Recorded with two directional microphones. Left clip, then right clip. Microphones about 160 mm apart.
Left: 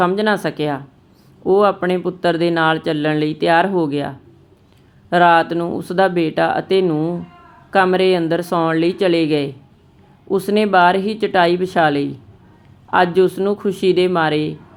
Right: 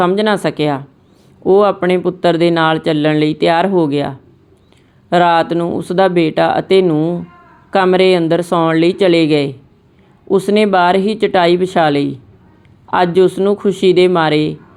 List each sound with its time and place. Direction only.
0.0 s speech: 25° right (ahead or behind)